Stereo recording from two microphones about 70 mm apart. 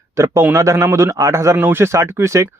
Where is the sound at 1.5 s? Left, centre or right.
Right.